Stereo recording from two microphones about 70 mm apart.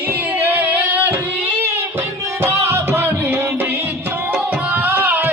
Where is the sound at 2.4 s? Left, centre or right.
Right.